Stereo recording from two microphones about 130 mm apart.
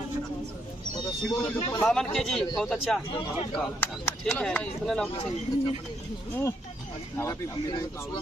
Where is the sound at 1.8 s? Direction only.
5° left (ahead or behind).